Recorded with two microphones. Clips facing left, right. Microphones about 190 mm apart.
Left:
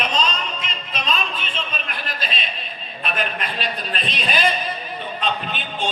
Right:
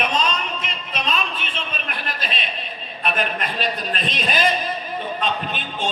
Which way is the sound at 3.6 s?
45° right (ahead or behind).